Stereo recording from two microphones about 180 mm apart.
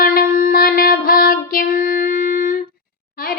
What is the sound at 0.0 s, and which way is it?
Child singing, 50° left (ahead or behind).